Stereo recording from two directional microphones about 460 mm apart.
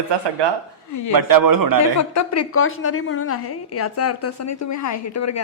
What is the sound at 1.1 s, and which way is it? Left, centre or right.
Speech, right.